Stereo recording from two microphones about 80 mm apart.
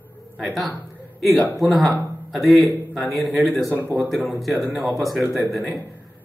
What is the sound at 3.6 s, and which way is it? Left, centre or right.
Speech, right.